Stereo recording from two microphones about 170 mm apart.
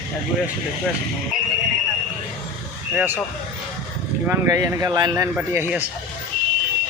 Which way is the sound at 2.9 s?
10° right (ahead or behind).